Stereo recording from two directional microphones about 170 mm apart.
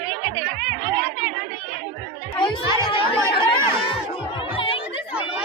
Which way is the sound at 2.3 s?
25° left (ahead or behind).